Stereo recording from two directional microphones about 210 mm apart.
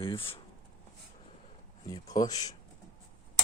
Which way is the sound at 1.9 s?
15° left (ahead or behind).